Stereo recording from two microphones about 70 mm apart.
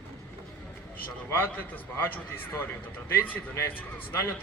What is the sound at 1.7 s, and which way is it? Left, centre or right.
A man's voice, left.